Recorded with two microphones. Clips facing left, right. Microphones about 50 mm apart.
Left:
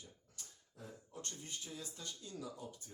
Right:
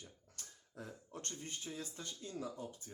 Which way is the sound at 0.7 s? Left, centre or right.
Right.